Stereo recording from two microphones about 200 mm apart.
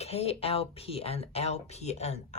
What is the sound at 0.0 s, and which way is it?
Speech, 30° left (ahead or behind).